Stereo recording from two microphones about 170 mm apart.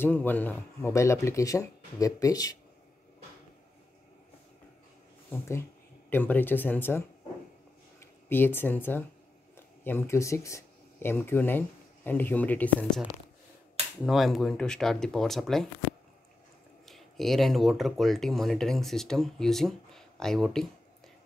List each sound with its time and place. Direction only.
0.0 s speech: 10° left (ahead or behind)
5.3 s speech: 15° left (ahead or behind)
8.3 s speech: 10° left (ahead or behind)
14.0 s speech: centre (ahead or behind)
16.8 s speech: centre (ahead or behind)